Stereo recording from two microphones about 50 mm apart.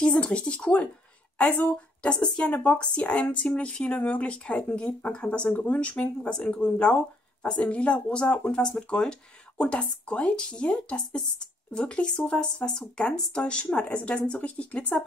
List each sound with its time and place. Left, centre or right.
0.0 s speech: centre
1.5 s speech: left
2.0 s speech: left